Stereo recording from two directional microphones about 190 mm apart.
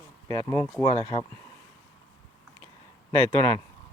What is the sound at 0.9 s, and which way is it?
Speech, 25° left (ahead or behind).